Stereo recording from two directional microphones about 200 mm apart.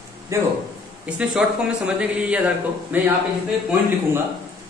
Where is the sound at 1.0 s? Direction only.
5° right (ahead or behind).